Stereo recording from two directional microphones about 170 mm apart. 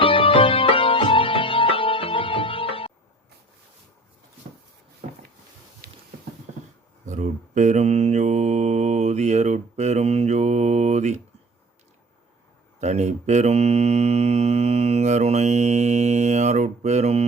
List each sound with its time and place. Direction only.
0.0 s music: 30° left (ahead or behind)
7.0 s mantra: 45° right (ahead or behind)
12.8 s mantra: 40° right (ahead or behind)